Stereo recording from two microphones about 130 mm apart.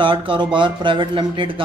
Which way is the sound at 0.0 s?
40° right (ahead or behind).